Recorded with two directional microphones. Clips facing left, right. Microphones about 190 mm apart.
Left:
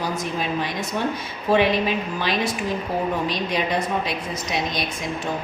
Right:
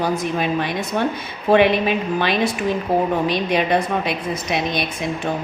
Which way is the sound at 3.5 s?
60° right (ahead or behind).